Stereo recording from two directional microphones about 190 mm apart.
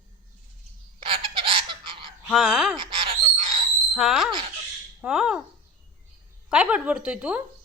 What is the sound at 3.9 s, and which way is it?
A woman's voice, centre (ahead or behind).